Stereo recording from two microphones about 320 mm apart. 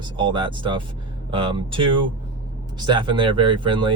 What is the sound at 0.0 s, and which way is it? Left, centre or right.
Speech, centre.